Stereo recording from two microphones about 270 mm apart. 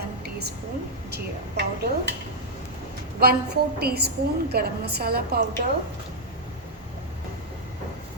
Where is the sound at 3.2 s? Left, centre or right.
Right.